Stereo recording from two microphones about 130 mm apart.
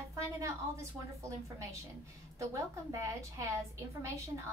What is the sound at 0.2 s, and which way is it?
Speech, 25° right (ahead or behind).